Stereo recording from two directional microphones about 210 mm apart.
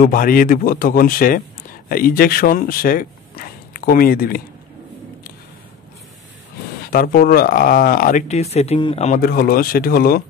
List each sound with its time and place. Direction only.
0.0 s a man's voice: 40° left (ahead or behind)
6.9 s speech: 45° left (ahead or behind)